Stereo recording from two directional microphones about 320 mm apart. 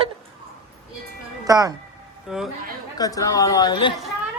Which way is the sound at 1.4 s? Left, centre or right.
Centre.